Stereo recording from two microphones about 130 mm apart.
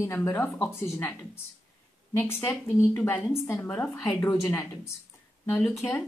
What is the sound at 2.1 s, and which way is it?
A woman's voice, 15° left (ahead or behind).